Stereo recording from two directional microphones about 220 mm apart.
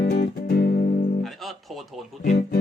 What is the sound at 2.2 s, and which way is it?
Music, 45° left (ahead or behind).